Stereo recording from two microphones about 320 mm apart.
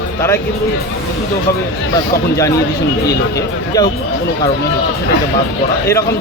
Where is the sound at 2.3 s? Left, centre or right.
Centre.